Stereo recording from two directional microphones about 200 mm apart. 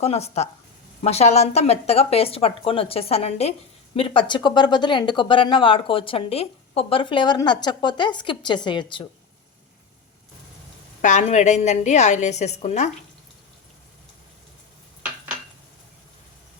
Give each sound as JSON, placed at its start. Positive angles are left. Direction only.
{"t": 0.0, "sound": "speech", "side_deg": 30}
{"t": 11.0, "sound": "speech", "side_deg": 35}